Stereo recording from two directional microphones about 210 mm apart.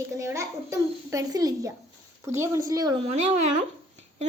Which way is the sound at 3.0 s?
30° right (ahead or behind).